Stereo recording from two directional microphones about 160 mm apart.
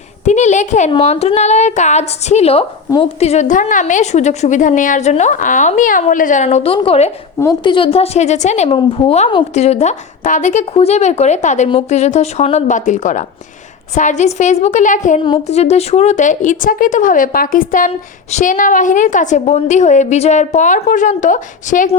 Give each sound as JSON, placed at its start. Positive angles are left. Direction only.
{"t": 0.3, "sound": "a woman's voice", "side_deg": 45}
{"t": 0.9, "sound": "a woman's voice", "side_deg": 40}
{"t": 15.2, "sound": "a woman's voice", "side_deg": 35}